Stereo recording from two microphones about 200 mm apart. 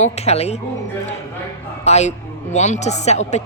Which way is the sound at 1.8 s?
35° left (ahead or behind).